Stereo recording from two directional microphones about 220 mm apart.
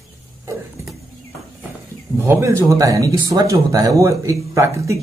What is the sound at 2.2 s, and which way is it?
Speech, 10° right (ahead or behind).